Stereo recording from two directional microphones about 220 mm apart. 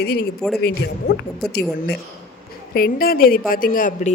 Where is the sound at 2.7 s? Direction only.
45° left (ahead or behind).